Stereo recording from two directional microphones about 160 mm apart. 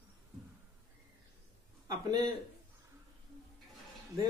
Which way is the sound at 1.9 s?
25° right (ahead or behind).